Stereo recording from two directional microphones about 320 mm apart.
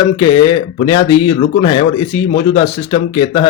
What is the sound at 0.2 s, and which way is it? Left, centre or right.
Speech, centre.